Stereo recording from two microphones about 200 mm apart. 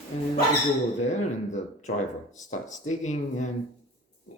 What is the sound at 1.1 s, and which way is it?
A man's voice, 35° left (ahead or behind).